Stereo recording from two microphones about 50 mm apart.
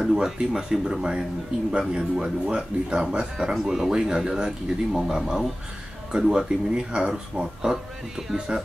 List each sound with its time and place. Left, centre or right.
0.0 s speech: centre
7.7 s speech: centre